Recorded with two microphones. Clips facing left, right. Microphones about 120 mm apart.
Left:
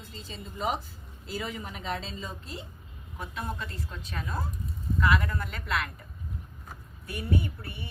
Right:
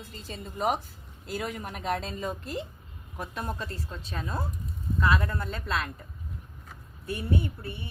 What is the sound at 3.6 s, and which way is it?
A woman's voice, 30° right (ahead or behind).